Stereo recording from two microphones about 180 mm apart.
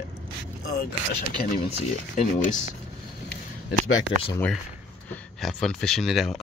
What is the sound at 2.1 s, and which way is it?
Speech, 40° left (ahead or behind).